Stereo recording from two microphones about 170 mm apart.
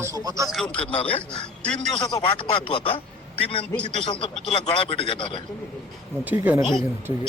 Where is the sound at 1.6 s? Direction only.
5° left (ahead or behind).